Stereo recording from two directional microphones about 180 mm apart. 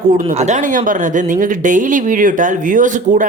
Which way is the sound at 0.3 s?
40° right (ahead or behind).